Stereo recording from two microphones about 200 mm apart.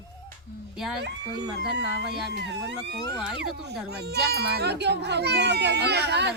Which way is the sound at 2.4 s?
60° right (ahead or behind).